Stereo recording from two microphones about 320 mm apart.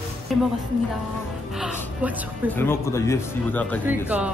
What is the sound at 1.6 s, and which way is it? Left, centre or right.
Speech, centre.